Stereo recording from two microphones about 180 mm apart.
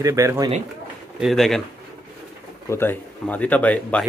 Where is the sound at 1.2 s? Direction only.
Centre (ahead or behind).